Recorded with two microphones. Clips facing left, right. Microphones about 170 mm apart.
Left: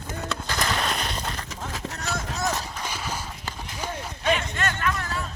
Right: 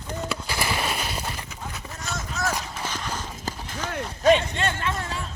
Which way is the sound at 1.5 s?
90° left.